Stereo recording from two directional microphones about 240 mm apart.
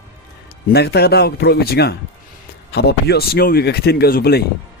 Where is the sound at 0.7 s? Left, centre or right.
Left.